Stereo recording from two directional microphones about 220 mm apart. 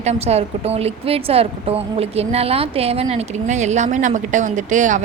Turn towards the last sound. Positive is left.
turn(degrees=-35)  # may be behind; listen again after turning